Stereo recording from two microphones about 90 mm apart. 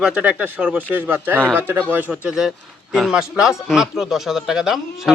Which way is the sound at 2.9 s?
5° right (ahead or behind).